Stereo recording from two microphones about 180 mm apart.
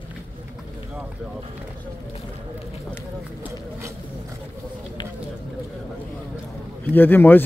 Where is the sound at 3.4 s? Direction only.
15° right (ahead or behind).